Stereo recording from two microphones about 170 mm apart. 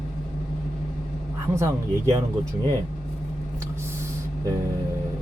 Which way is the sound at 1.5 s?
20° right (ahead or behind).